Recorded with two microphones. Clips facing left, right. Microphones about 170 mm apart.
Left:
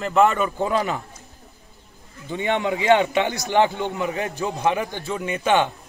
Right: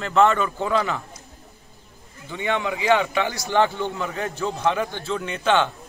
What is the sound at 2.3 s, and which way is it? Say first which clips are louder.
A man's voice: left 2 dB; 20° left (ahead or behind).